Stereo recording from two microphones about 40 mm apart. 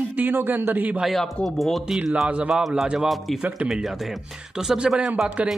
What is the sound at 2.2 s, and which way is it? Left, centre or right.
Speech, right.